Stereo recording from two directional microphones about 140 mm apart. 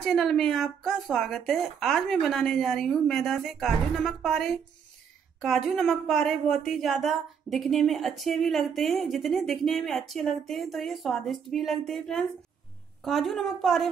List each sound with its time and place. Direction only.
0.0 s a woman's voice: centre (ahead or behind)